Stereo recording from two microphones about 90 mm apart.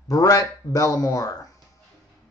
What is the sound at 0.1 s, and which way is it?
Speech, 45° left (ahead or behind).